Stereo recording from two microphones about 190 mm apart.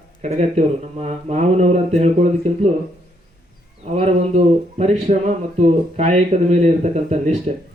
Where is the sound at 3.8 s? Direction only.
35° right (ahead or behind).